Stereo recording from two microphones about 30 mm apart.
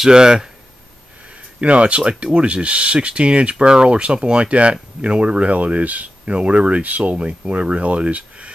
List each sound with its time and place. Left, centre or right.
0.1 s speech: right
1.6 s speech: right
6.2 s speech: right